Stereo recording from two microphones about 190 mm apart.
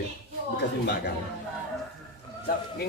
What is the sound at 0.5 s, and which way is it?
Speech, 65° left (ahead or behind).